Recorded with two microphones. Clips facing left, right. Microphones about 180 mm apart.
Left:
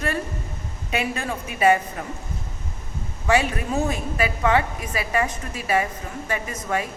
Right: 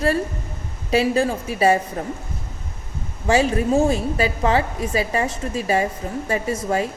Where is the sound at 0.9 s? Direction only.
30° right (ahead or behind).